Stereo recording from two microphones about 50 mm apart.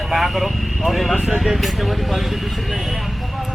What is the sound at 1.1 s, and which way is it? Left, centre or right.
Speech, centre.